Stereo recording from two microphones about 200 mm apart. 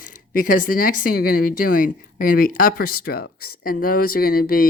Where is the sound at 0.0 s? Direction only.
45° left (ahead or behind).